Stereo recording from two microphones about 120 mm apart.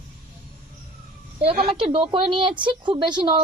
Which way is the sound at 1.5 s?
50° right (ahead or behind).